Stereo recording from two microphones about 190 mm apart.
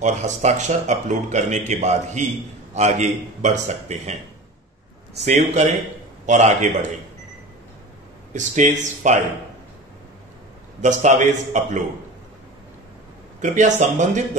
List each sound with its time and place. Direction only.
0.0 s a man's voice: 40° right (ahead or behind)
5.2 s a man's voice: 35° right (ahead or behind)
8.3 s a man's voice: 40° right (ahead or behind)
10.8 s a man's voice: 40° right (ahead or behind)
13.4 s a man's voice: 40° right (ahead or behind)